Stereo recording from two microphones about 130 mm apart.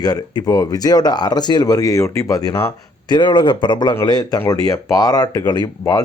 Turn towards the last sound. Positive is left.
turn(degrees=30)  # may be behind; listen again after turning